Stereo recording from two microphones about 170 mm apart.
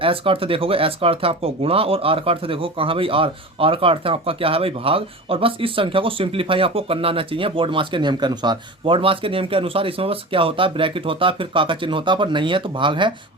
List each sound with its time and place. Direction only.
0.0 s speech: 30° right (ahead or behind)